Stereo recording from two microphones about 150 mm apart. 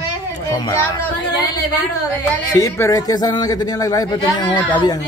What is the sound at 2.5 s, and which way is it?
A man's voice, 20° left (ahead or behind).